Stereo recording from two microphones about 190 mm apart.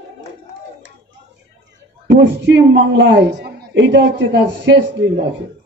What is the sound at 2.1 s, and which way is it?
A woman's voice, 70° right (ahead or behind).